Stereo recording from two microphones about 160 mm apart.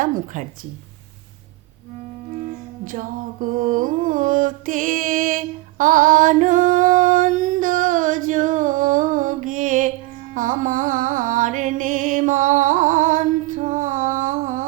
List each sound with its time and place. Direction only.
0.0 s speech: 55° right (ahead or behind)
2.8 s music: 60° right (ahead or behind)